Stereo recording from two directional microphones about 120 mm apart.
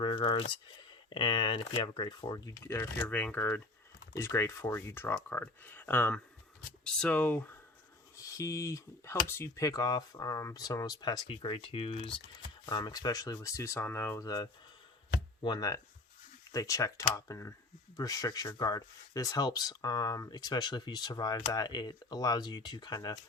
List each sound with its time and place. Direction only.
0.0 s speech: 45° left (ahead or behind)
2.6 s speech: 20° left (ahead or behind)
8.1 s speech: 25° left (ahead or behind); by 12.2 s 45° left (ahead or behind)
12.6 s speech: 35° left (ahead or behind)